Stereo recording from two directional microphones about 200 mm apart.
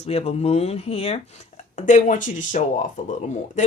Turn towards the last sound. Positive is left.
turn(degrees=40)  # may be behind; listen again after turning